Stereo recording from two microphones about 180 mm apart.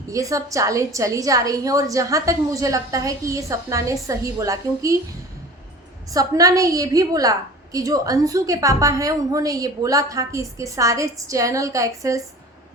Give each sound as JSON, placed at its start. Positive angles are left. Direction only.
{"t": 0.1, "sound": "a woman's voice", "side_deg": -15}
{"t": 6.1, "sound": "a woman's voice", "side_deg": -20}